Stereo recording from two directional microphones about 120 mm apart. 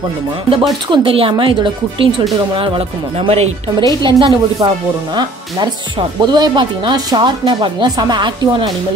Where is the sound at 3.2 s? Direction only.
55° right (ahead or behind).